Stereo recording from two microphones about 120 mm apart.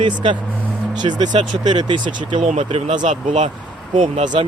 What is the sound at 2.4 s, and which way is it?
Speech, 70° right (ahead or behind).